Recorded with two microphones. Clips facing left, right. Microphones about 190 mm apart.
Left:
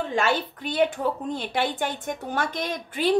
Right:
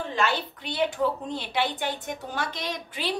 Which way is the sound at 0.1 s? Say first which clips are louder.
Left 2 dB; 50° left (ahead or behind).